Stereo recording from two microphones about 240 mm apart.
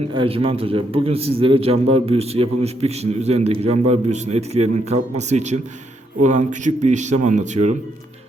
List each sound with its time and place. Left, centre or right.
0.1 s a man's voice: right